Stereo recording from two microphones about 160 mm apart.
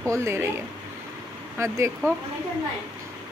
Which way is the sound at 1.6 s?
20° right (ahead or behind).